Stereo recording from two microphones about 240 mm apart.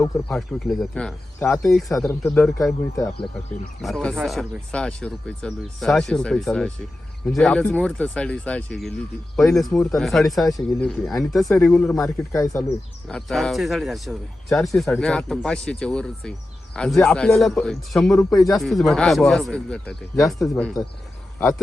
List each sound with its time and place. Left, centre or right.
0.0 s speech: centre
3.8 s speech: centre
12.3 s speech: centre
13.1 s speech: centre